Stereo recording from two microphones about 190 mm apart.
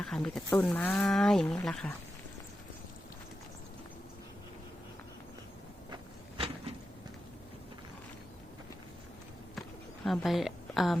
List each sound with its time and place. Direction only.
0.0 s speech: 5° left (ahead or behind)
5.9 s insect: 30° right (ahead or behind)
9.6 s a sound: centre (ahead or behind)